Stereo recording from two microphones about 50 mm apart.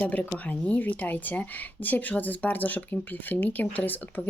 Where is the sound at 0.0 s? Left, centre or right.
Left.